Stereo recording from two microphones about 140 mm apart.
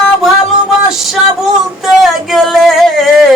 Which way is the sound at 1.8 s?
Centre (ahead or behind).